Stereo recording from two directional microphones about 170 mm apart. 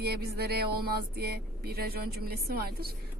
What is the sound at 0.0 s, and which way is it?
A woman's voice, 70° right (ahead or behind).